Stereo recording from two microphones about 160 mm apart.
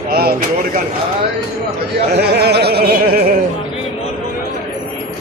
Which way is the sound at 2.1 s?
90° right.